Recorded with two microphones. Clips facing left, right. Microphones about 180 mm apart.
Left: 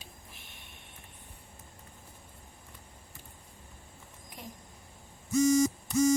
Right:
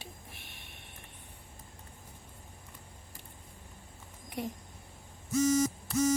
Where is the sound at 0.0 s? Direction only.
65° right (ahead or behind).